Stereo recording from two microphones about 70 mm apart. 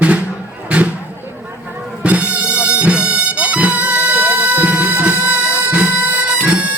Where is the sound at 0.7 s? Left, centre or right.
Centre.